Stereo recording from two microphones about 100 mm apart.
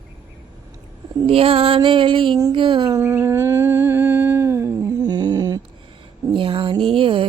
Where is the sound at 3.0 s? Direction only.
25° right (ahead or behind).